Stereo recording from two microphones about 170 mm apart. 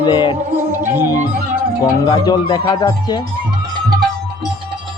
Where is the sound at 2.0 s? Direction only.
25° left (ahead or behind).